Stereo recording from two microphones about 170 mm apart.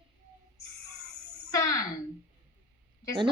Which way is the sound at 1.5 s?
20° left (ahead or behind).